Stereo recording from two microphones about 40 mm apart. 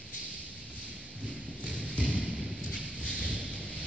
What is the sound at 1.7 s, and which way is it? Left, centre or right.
Music, left.